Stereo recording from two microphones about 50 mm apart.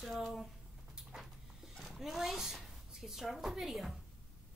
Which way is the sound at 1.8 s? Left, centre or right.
Centre.